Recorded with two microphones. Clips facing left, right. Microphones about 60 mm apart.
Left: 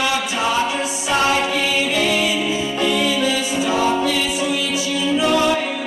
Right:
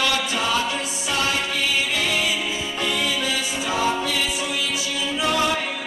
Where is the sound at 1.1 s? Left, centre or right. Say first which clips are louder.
Left 7 dB; left.